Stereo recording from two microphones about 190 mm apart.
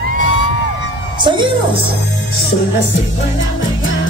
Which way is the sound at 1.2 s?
25° right (ahead or behind).